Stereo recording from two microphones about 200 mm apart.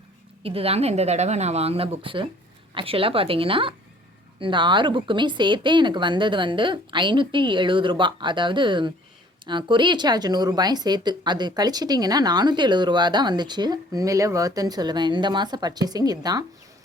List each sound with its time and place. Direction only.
0.4 s speech: 30° right (ahead or behind)